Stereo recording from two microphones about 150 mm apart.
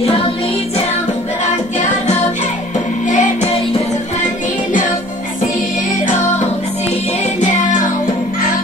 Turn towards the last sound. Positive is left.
turn(degrees=60)  # may be behind; listen again after turning